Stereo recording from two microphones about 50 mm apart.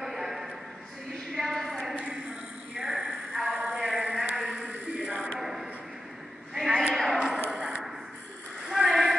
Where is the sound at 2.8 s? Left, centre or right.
Centre.